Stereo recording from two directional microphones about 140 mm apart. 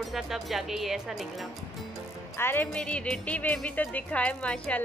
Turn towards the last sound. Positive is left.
turn(degrees=10)  # may be behind; listen again after turning